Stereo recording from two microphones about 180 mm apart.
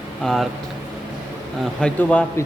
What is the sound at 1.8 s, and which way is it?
Speech, 10° left (ahead or behind).